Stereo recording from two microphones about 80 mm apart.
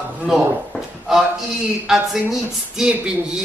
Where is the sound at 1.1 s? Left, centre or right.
Centre.